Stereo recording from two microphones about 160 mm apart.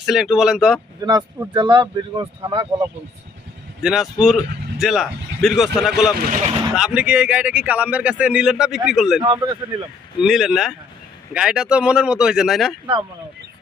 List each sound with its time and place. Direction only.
0.0 s speech: centre (ahead or behind)
1.0 s speech: 25° right (ahead or behind)
3.8 s speech: centre (ahead or behind)
9.2 s speech: 25° right (ahead or behind)
10.2 s speech: centre (ahead or behind)